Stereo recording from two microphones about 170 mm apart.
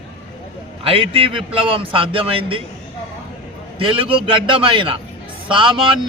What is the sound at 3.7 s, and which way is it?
A man's voice, 30° right (ahead or behind).